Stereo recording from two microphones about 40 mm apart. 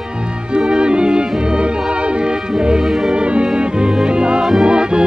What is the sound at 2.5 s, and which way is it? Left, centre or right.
Music, right.